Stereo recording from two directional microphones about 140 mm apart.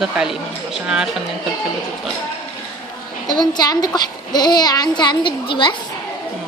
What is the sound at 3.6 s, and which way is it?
A woman's voice, 30° left (ahead or behind).